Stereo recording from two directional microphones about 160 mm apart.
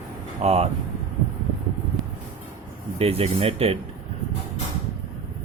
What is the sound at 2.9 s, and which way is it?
Speech, 40° right (ahead or behind).